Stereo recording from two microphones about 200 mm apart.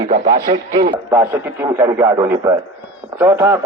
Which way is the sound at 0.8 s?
25° right (ahead or behind).